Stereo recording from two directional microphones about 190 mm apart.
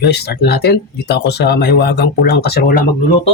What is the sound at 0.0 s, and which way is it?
Speech, 60° left (ahead or behind).